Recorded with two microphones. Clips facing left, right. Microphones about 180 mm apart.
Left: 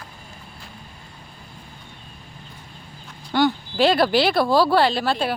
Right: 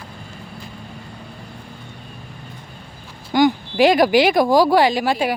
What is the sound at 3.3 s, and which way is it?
Speech, 15° right (ahead or behind).